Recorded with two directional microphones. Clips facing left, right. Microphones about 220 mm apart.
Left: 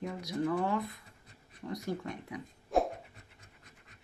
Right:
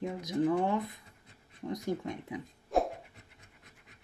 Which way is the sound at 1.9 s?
20° right (ahead or behind).